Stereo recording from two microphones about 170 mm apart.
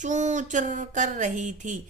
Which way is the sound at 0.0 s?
45° right (ahead or behind).